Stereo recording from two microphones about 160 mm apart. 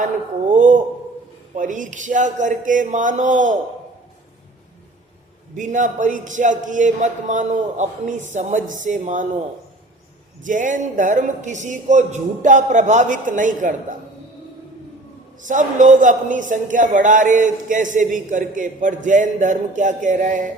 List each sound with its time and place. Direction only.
0.5 s a sound: 55° right (ahead or behind)
1.5 s a man's voice: 55° right (ahead or behind)
5.5 s a man's voice: 50° right (ahead or behind)
10.4 s a man's voice: 55° right (ahead or behind)
15.4 s a man's voice: 50° right (ahead or behind)